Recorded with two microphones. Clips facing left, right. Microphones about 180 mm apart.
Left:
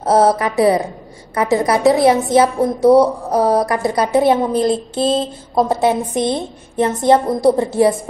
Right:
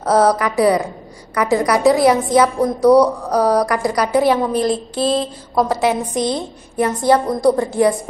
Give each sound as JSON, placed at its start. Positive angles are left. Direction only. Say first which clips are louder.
{"t": 0.0, "sound": "a woman's voice", "louder": "left 1 dB", "side_deg": 25}